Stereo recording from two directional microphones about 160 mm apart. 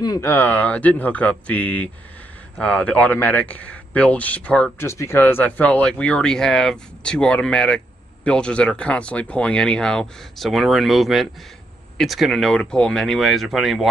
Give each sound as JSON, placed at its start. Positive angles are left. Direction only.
{"t": 0.0, "sound": "speech", "side_deg": 25}
{"t": 0.3, "sound": "a man's voice", "side_deg": 10}